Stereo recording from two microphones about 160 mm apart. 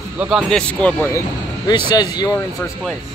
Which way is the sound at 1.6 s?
25° left (ahead or behind).